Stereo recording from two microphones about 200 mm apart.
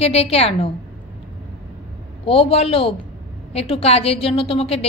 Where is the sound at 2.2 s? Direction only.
30° left (ahead or behind).